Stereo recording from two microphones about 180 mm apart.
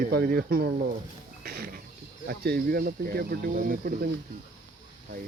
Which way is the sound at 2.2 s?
60° right (ahead or behind).